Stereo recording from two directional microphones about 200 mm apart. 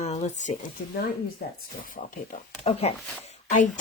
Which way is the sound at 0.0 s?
35° left (ahead or behind).